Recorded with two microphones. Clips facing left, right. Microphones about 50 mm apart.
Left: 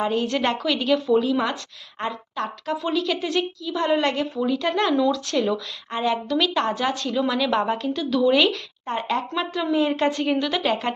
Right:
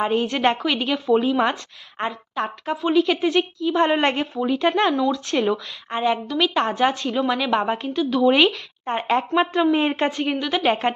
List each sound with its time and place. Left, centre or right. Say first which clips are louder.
0.0 s speech: right 2 dB; right
1.1 s speech: right 2 dB; right
9.9 s a woman's voice: left 1 dB; right
10.6 s speech: right 3 dB; right